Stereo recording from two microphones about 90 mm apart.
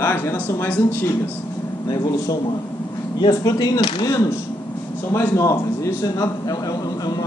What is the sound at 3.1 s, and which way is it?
Speech, 55° left (ahead or behind).